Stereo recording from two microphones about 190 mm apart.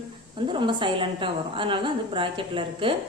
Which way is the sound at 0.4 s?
25° right (ahead or behind).